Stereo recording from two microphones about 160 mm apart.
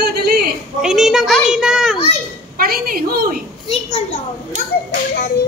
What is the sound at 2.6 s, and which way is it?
Speech, 65° right (ahead or behind).